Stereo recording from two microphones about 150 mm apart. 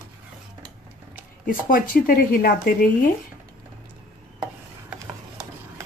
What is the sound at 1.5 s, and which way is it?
Speech, 75° left (ahead or behind).